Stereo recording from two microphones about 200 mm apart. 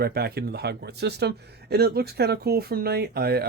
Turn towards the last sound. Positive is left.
turn(degrees=-50)  # may be behind; listen again after turning